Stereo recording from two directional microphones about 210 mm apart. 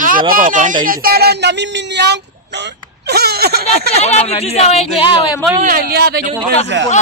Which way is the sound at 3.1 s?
50° right (ahead or behind).